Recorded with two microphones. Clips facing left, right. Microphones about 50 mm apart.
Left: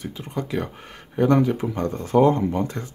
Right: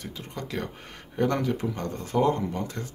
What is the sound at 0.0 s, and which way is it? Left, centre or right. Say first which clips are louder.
Speech: left 7 dB; centre.